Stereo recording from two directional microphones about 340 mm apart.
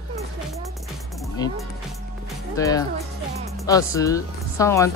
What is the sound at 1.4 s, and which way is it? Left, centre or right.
Speech, centre.